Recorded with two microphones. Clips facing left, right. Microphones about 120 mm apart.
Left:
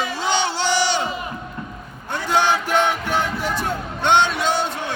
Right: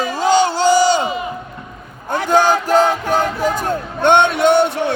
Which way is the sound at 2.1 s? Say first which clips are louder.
Right 5 dB; 50° right (ahead or behind).